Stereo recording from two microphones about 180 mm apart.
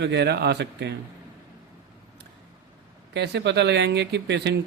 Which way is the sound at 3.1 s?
70° right (ahead or behind).